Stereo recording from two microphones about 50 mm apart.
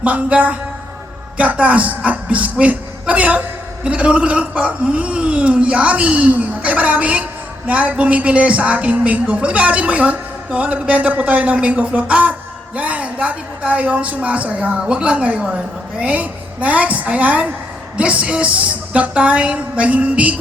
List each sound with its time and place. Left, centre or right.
0.0 s speech: right
16.0 s speech: right